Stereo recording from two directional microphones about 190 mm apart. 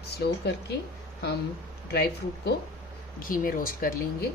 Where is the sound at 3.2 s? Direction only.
45° left (ahead or behind).